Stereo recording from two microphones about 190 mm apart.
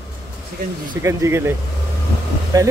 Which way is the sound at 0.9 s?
15° right (ahead or behind).